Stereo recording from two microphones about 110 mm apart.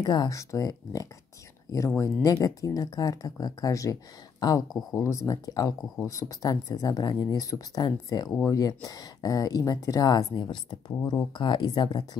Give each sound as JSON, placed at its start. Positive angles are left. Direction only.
{"t": 0.0, "sound": "speech", "side_deg": 40}